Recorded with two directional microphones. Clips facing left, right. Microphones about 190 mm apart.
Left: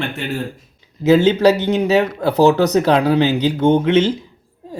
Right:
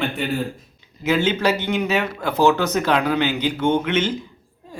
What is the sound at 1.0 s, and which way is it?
Speech, 40° left (ahead or behind).